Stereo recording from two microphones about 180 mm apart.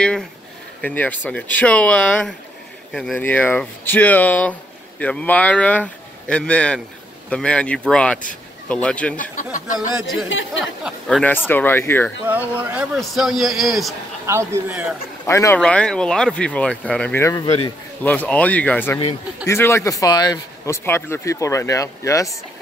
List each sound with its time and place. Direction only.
0.7 s speech: 10° left (ahead or behind)
9.2 s speech: 45° left (ahead or behind)
9.8 s speech: centre (ahead or behind)
12.3 s speech: 10° right (ahead or behind)
14.2 s speech: 15° right (ahead or behind)
14.7 s speech: 5° right (ahead or behind)
15.2 s speech: 15° left (ahead or behind)
15.6 s speech: 5° left (ahead or behind)